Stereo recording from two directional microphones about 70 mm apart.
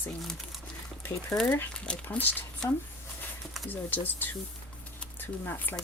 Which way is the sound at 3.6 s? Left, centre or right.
Left.